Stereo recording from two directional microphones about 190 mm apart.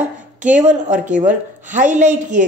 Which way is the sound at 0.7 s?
40° right (ahead or behind).